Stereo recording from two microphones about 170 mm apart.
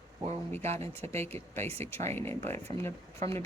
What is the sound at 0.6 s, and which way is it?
Speech, 40° right (ahead or behind).